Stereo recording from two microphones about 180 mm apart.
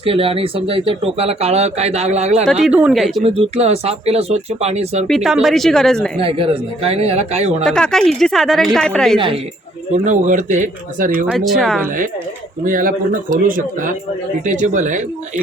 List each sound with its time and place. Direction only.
0.0 s speech: 30° right (ahead or behind)
2.6 s speech: 5° right (ahead or behind)
3.2 s speech: 35° right (ahead or behind)
5.0 s speech: centre (ahead or behind)
6.1 s speech: 30° right (ahead or behind)
7.6 s speech: 5° left (ahead or behind)
9.1 s speech: 30° right (ahead or behind)
9.9 s speech: 40° right (ahead or behind)
11.3 s speech: centre (ahead or behind)
12.6 s speech: 50° right (ahead or behind)
14.4 s speech: 45° right (ahead or behind)